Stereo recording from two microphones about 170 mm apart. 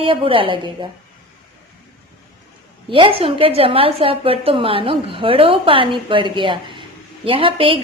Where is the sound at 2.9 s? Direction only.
30° right (ahead or behind).